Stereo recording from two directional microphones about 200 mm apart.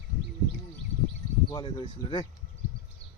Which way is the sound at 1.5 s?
25° left (ahead or behind).